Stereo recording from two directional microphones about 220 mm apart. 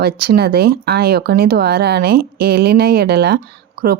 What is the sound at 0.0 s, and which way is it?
Speech, 45° right (ahead or behind).